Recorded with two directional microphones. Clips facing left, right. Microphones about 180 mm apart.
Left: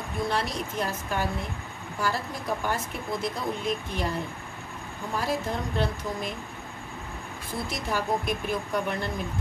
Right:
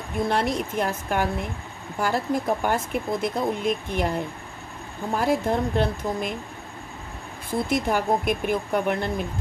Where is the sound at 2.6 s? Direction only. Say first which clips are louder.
Right 6 dB; 55° right (ahead or behind).